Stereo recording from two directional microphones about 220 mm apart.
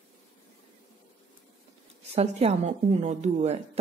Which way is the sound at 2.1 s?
30° right (ahead or behind).